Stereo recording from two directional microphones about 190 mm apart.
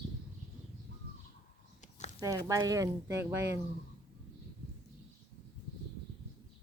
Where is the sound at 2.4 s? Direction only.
20° right (ahead or behind).